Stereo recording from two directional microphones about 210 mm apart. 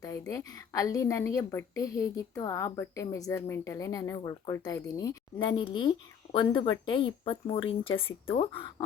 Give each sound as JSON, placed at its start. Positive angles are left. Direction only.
{"t": 0.0, "sound": "a woman's voice", "side_deg": 15}